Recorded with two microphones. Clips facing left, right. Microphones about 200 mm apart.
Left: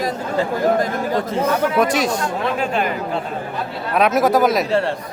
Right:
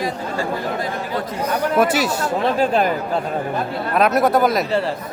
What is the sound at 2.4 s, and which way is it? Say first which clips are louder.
Speech: right 5 dB; 35° right (ahead or behind).